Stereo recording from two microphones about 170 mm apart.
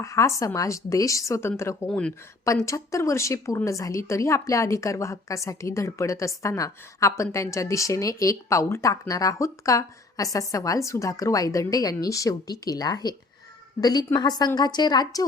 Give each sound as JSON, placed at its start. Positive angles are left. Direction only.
{"t": 0.0, "sound": "a woman's voice", "side_deg": 20}
{"t": 2.4, "sound": "a woman's voice", "side_deg": 20}